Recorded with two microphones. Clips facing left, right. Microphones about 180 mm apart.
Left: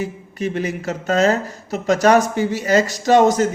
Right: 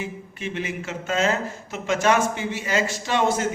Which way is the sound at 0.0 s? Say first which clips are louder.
Left 7 dB; 40° left (ahead or behind).